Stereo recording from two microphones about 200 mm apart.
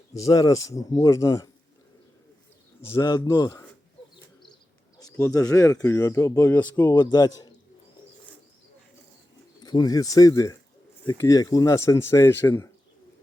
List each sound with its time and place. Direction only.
0.1 s speech: 15° left (ahead or behind)
2.8 s speech: 15° left (ahead or behind)
4.9 s a man's voice: 15° left (ahead or behind)
9.6 s speech: 20° left (ahead or behind)